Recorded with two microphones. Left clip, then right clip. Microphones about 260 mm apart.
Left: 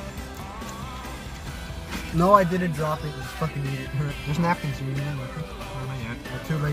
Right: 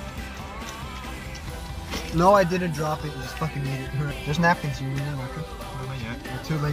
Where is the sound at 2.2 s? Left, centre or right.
Centre.